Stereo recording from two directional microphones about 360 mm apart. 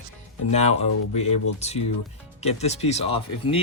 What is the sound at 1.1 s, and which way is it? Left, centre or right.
Speech, centre.